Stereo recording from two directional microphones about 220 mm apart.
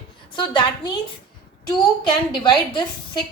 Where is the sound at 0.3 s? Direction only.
20° left (ahead or behind).